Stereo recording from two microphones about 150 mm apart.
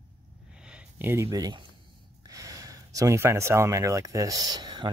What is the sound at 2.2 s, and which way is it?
Speech, 25° right (ahead or behind).